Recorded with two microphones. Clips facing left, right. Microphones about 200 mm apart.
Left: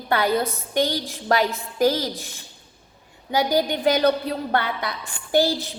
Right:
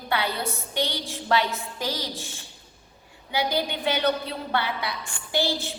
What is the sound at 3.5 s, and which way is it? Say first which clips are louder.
A woman's voice: left 9 dB; 40° left (ahead or behind).